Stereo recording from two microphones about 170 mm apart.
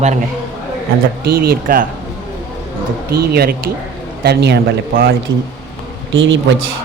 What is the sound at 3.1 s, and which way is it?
Speech, 65° right (ahead or behind).